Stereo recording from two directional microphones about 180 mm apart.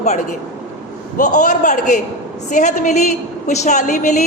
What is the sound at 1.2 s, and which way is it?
A man's voice, 45° left (ahead or behind).